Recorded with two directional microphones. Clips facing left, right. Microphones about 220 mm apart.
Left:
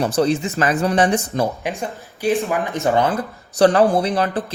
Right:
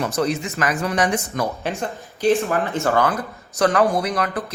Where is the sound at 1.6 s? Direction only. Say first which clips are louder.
Even; 15° left (ahead or behind).